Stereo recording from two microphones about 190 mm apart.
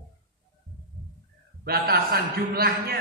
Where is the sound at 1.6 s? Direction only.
55° right (ahead or behind).